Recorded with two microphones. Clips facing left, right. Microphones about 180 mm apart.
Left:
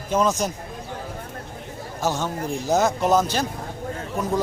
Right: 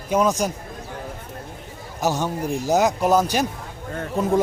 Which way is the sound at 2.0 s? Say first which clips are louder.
Right 2 dB; 15° right (ahead or behind).